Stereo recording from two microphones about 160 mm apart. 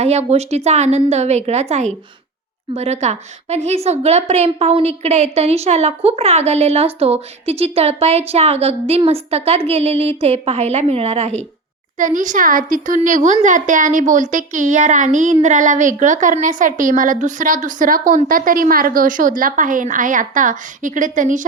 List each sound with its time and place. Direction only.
0.0 s a woman's voice: 40° right (ahead or behind)
2.7 s a woman's voice: 45° right (ahead or behind)
11.9 s a woman's voice: 55° right (ahead or behind)